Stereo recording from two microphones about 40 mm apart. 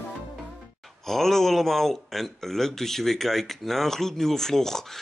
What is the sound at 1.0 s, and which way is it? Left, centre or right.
Speech, centre.